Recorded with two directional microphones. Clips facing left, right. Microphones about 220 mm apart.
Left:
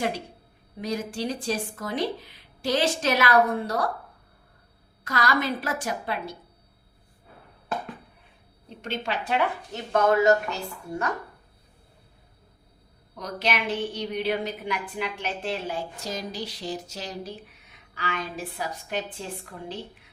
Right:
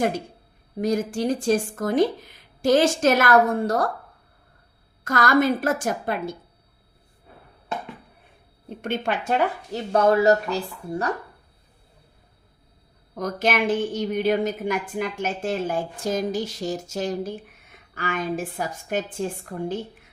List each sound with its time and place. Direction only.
0.8 s a woman's voice: 45° right (ahead or behind)
5.0 s a woman's voice: 50° right (ahead or behind)
8.7 s a woman's voice: 55° right (ahead or behind)
9.9 s speech: 35° right (ahead or behind)
13.1 s a woman's voice: 50° right (ahead or behind)